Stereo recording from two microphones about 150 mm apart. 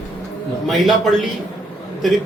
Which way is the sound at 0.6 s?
Centre (ahead or behind).